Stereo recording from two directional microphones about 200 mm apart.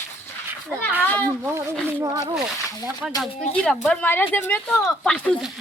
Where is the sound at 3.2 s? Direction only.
5° left (ahead or behind).